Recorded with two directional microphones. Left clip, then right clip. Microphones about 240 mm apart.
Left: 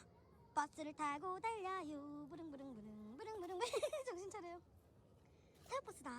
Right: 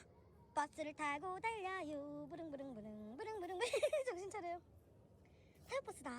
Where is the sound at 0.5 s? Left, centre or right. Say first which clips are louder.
Right 1 dB; centre.